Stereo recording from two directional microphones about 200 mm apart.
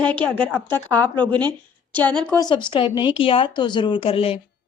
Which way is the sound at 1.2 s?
20° right (ahead or behind).